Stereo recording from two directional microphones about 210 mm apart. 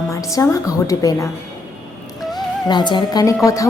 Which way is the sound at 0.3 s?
15° left (ahead or behind).